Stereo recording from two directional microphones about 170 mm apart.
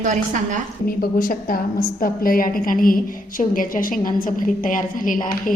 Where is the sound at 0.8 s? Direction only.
55° left (ahead or behind).